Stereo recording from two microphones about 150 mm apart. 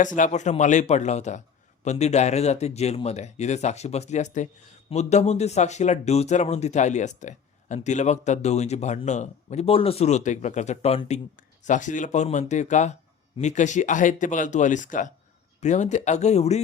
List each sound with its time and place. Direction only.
0.2 s speech: 50° left (ahead or behind)
11.3 s speech: 55° left (ahead or behind)